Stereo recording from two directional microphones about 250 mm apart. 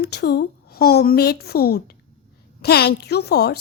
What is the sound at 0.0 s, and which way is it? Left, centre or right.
A woman's voice, left.